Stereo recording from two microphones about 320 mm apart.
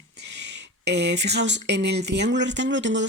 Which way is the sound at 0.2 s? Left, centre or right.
Right.